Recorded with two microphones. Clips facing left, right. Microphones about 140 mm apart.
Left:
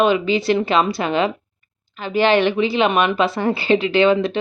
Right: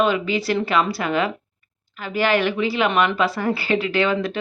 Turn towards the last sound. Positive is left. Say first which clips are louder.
# left 5 dB
turn(degrees=25)  # may be behind; listen again after turning